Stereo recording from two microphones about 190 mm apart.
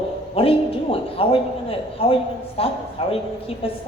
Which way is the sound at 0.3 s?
30° left (ahead or behind).